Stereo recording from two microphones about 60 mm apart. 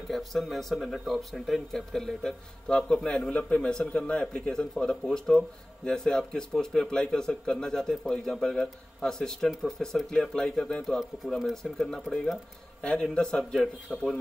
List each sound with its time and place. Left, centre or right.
0.1 s speech: centre
13.1 s speech: centre
13.4 s speech: centre